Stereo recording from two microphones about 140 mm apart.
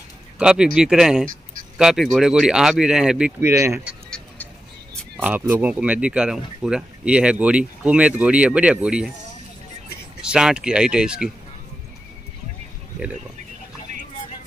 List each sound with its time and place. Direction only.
0.4 s speech: 5° right (ahead or behind)
3.3 s speech: 20° right (ahead or behind)
5.2 s speech: 15° right (ahead or behind)
10.2 s speech: 5° right (ahead or behind)